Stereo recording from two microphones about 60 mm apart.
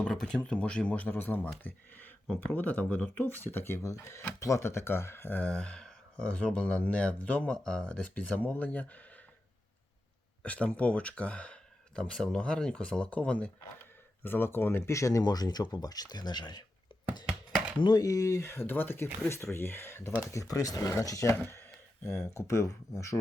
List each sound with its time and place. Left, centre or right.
0.0 s speech: centre; by 3.8 s left
3.8 s speech: left
5.5 s speech: centre
7.5 s speech: centre
10.4 s speech: left
14.3 s speech: left
14.9 s speech: left
17.9 s speech: left
18.4 s speech: left
19.3 s speech: left
20.3 s speech: left
21.4 s a sound: left
22.2 s speech: left